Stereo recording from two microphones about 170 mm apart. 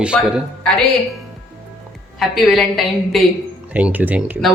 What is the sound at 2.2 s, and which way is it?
A woman's voice, centre (ahead or behind).